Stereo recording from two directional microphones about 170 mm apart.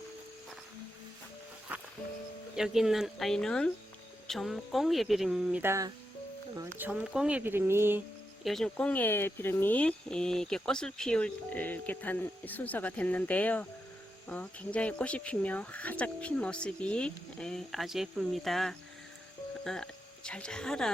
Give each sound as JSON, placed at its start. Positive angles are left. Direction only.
{"t": 2.6, "sound": "speech", "side_deg": 0}
{"t": 8.4, "sound": "speech", "side_deg": 0}